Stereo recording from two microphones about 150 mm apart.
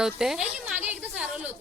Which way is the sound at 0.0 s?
5° right (ahead or behind).